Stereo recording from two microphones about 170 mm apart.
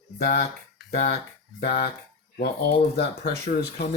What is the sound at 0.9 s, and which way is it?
Speech, 70° left (ahead or behind).